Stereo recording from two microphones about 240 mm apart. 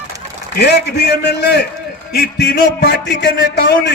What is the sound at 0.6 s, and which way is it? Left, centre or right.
A man's voice, left.